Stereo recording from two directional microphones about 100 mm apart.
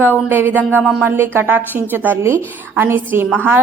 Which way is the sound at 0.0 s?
20° right (ahead or behind).